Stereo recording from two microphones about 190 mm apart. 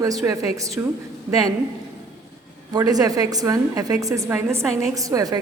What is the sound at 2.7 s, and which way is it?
A woman's voice, 20° right (ahead or behind).